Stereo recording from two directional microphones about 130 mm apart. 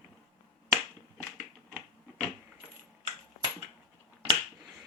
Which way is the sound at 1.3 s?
Centre (ahead or behind).